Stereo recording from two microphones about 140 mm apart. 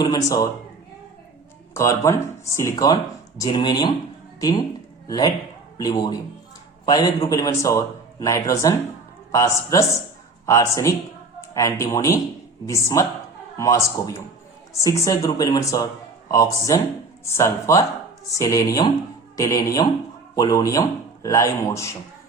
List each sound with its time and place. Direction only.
0.0 s speech: 25° left (ahead or behind)
1.7 s speech: 20° left (ahead or behind)